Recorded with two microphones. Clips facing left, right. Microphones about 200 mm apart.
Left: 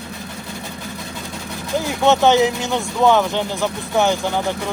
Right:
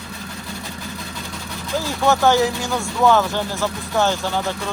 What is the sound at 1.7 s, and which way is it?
Speech, 20° left (ahead or behind).